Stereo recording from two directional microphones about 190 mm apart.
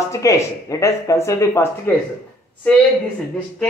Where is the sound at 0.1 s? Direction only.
15° left (ahead or behind).